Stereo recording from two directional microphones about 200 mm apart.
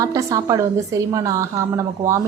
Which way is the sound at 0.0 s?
15° right (ahead or behind).